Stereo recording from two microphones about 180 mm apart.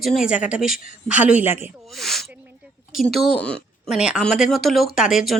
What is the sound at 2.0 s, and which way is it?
Speech, centre (ahead or behind).